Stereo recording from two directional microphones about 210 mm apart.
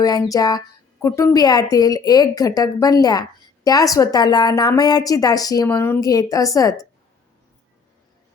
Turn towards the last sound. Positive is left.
turn(degrees=15)  # may be behind; listen again after turning